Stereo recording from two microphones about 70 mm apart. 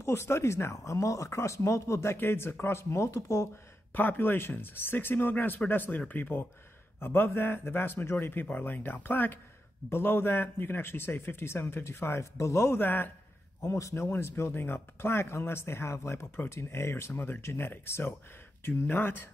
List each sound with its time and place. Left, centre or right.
0.0 s speech: left
3.9 s speech: left
13.6 s a man's voice: left
14.0 s speech: left